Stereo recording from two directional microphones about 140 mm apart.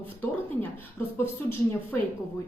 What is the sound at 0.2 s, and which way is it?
A woman's voice, 15° left (ahead or behind).